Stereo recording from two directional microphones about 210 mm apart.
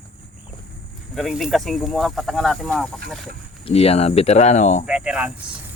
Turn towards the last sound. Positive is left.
turn(degrees=-5)  # may be behind; listen again after turning